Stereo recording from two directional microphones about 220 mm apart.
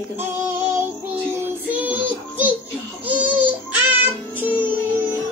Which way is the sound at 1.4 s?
5° right (ahead or behind).